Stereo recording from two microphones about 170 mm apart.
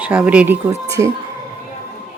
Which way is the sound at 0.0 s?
10° right (ahead or behind).